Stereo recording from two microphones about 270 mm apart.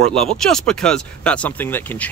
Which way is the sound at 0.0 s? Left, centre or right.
Centre.